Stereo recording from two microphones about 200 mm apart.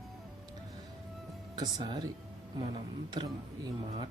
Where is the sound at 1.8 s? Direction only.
25° right (ahead or behind).